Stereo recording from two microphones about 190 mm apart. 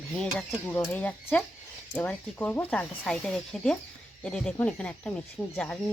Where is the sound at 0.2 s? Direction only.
5° left (ahead or behind).